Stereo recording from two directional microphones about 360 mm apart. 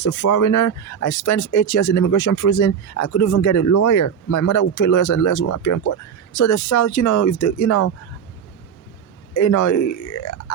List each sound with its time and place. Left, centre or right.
0.0 s speech: left
9.3 s speech: left